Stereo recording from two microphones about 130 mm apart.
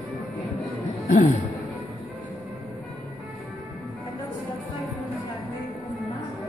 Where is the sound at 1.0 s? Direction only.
60° left (ahead or behind).